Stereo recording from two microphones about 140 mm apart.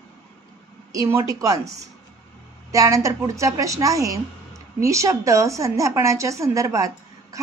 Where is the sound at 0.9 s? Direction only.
25° right (ahead or behind).